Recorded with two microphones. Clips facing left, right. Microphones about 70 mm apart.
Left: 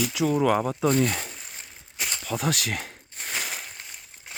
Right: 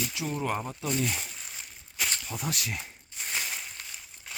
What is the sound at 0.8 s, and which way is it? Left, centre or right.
Speech, left.